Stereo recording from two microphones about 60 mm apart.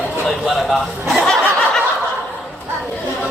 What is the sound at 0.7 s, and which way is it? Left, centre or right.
Chuckle, centre.